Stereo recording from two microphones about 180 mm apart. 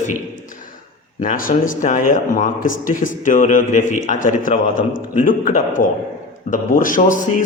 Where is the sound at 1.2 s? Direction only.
50° left (ahead or behind).